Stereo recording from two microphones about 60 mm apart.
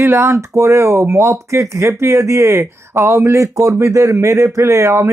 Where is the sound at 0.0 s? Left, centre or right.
Right.